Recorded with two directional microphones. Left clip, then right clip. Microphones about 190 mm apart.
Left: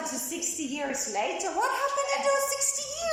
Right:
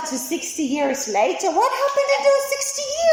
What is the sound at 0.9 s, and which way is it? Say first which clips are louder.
A woman's voice: right 10 dB; 20° right (ahead or behind).